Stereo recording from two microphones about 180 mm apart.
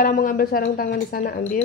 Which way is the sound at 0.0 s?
50° left (ahead or behind).